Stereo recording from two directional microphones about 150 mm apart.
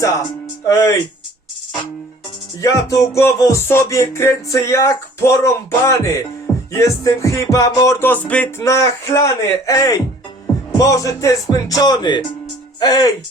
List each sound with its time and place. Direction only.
0.6 s speech: 20° left (ahead or behind)
2.6 s music: 20° left (ahead or behind)